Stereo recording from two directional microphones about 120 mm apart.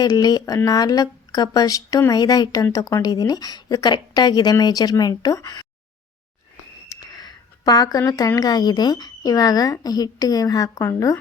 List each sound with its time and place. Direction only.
0.0 s speech: 30° left (ahead or behind)
6.8 s a sound: 30° left (ahead or behind)
8.4 s speech: 35° left (ahead or behind)